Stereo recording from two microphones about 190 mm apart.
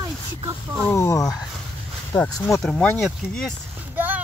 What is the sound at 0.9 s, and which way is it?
Speech, 15° left (ahead or behind).